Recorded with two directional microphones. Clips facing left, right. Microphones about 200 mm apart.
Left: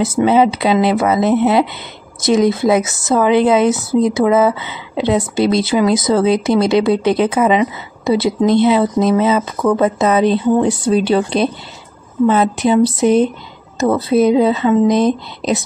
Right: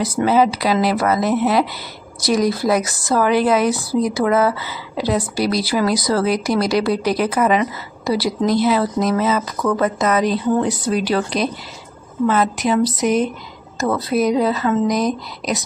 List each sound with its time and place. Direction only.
0.0 s a woman's voice: 25° left (ahead or behind)